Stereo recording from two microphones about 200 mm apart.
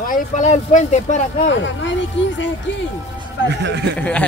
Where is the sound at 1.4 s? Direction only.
65° left (ahead or behind).